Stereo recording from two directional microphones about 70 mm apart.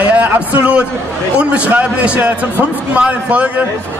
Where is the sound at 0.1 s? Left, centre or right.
Right.